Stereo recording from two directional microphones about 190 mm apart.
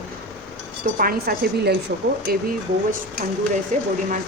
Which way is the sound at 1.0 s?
50° right (ahead or behind).